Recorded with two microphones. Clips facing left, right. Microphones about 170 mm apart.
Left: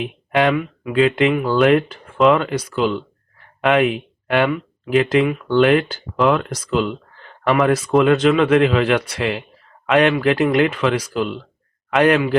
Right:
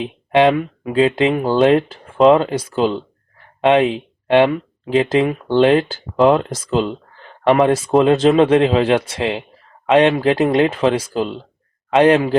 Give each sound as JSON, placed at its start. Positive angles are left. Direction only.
{"t": 0.0, "sound": "speech", "side_deg": -25}